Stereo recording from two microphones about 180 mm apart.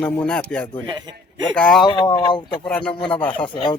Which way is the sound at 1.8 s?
25° left (ahead or behind).